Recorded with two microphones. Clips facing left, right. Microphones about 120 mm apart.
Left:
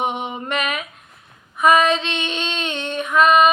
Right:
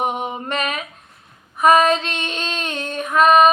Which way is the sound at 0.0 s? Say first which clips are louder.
Right 1 dB; 40° right (ahead or behind).